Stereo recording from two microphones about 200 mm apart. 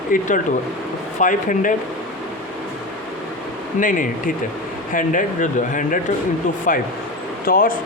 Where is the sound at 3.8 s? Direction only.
40° left (ahead or behind).